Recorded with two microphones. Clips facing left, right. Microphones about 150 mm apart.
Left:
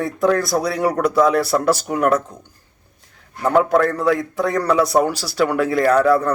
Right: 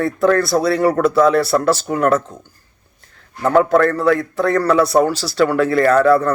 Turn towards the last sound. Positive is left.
turn(degrees=15)  # may be behind; listen again after turning